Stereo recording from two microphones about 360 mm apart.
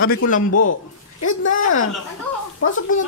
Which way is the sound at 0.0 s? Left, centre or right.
Left.